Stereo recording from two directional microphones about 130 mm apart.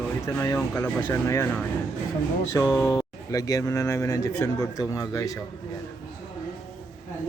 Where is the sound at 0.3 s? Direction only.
15° left (ahead or behind).